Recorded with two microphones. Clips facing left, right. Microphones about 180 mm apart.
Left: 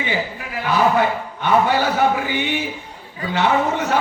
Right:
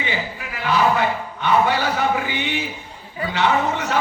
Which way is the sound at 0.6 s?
55° left (ahead or behind).